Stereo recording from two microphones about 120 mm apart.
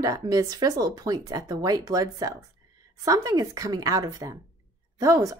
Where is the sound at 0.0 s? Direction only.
30° right (ahead or behind).